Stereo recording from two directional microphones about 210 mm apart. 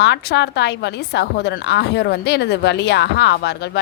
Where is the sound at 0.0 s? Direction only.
50° left (ahead or behind).